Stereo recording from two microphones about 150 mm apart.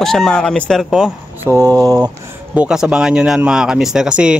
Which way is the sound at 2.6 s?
5° right (ahead or behind).